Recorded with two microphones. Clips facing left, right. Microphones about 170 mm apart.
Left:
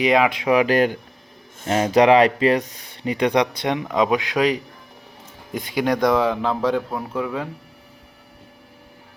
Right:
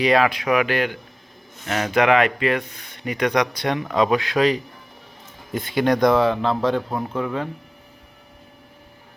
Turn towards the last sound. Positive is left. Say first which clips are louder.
# right 1 dB
turn(degrees=10)  # may be behind; listen again after turning